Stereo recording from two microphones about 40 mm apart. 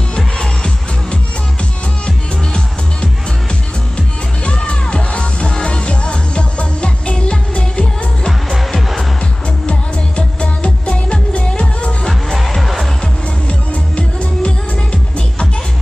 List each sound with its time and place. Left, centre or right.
0.1 s music: centre
2.0 s music: left
4.5 s music: left
8.5 s music: centre
9.7 s music: left
12.4 s music: centre
13.5 s music: left